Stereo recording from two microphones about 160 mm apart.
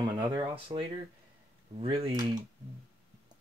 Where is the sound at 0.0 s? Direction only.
25° right (ahead or behind).